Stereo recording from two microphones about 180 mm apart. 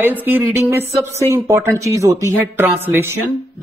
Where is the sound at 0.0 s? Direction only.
10° right (ahead or behind).